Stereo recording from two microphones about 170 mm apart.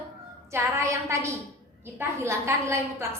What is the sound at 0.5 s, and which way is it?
A woman's voice, 15° right (ahead or behind).